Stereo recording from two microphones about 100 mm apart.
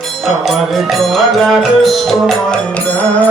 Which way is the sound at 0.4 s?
Centre (ahead or behind).